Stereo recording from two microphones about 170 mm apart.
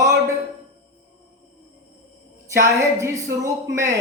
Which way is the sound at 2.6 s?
15° right (ahead or behind).